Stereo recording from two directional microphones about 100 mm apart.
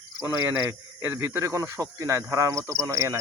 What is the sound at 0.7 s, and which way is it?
Speech, 25° right (ahead or behind).